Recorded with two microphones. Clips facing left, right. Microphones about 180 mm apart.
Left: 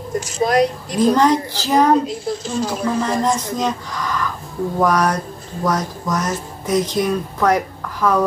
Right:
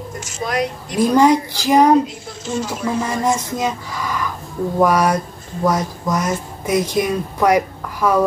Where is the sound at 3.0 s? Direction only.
10° right (ahead or behind).